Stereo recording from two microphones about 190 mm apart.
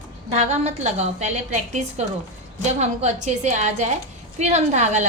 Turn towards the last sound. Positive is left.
turn(degrees=-35)  # may be behind; listen again after turning